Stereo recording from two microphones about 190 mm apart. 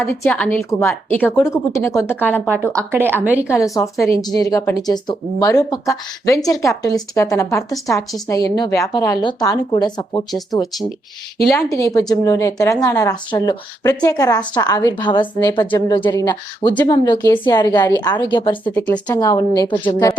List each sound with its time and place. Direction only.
0.0 s speech: 10° left (ahead or behind)
2.7 s speech: 10° right (ahead or behind)
3.5 s speech: 15° left (ahead or behind)
11.5 s speech: 15° left (ahead or behind)